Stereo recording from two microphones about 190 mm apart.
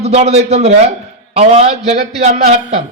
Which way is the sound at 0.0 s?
35° right (ahead or behind).